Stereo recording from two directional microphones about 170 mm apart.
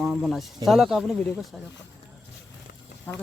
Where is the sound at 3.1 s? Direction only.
10° left (ahead or behind).